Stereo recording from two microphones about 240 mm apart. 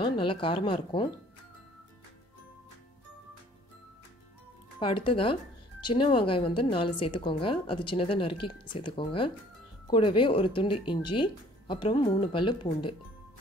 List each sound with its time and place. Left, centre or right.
0.0 s speech: left
4.7 s speech: left